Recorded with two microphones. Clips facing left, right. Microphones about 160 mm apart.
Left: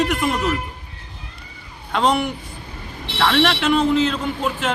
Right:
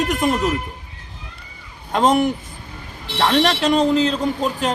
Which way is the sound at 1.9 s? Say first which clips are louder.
Right 3 dB; 45° right (ahead or behind).